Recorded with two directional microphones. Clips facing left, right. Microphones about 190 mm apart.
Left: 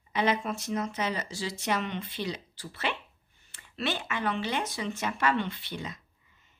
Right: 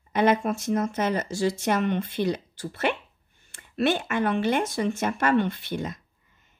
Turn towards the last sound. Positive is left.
turn(degrees=-50)  # may be behind; listen again after turning